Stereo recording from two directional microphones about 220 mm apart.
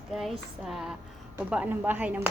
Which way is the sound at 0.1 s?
Centre (ahead or behind).